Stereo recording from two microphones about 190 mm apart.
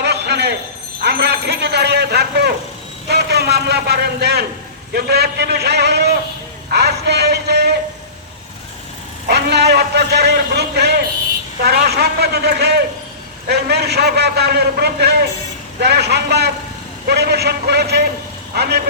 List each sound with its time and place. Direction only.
0.0 s a sound: 60° right (ahead or behind)
1.0 s a man's voice: 55° right (ahead or behind)
9.2 s a man's voice: 60° right (ahead or behind)